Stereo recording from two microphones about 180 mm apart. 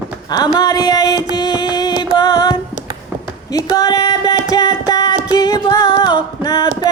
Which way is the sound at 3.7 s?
20° left (ahead or behind).